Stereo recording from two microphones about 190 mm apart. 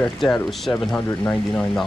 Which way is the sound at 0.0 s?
Centre (ahead or behind).